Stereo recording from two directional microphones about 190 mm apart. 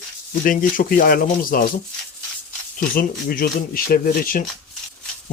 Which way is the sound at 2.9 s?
50° left (ahead or behind).